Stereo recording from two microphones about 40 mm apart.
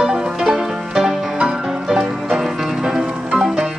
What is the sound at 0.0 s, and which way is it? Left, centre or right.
Music, centre.